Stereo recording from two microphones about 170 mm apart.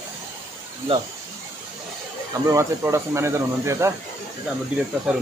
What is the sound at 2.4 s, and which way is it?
Speech, 15° right (ahead or behind).